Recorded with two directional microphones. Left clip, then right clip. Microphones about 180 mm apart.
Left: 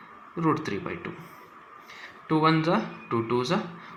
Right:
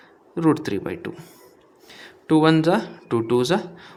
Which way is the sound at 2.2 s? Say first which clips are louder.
Right 6 dB; 50° right (ahead or behind).